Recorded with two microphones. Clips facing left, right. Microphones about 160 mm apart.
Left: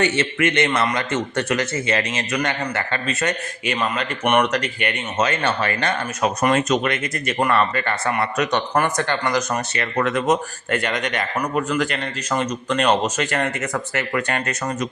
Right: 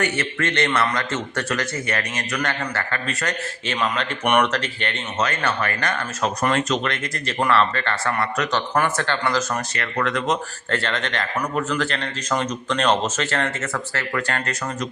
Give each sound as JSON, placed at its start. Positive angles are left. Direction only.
{"t": 0.0, "sound": "a man's voice", "side_deg": 20}
{"t": 3.7, "sound": "speech", "side_deg": 5}
{"t": 5.1, "sound": "a man's voice", "side_deg": 20}
{"t": 8.0, "sound": "a man's voice", "side_deg": 20}
{"t": 8.7, "sound": "speech", "side_deg": 10}